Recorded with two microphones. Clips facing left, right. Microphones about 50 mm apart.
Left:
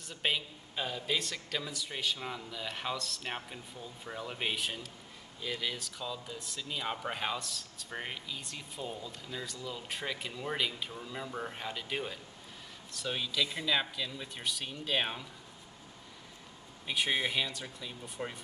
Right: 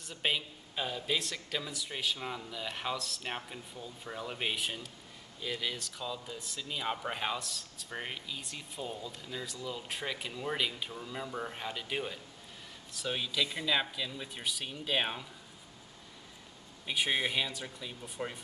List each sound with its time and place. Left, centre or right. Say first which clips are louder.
0.0 s speech: even; centre
16.8 s speech: even; centre